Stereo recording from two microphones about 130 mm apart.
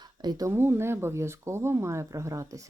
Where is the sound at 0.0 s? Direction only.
30° right (ahead or behind).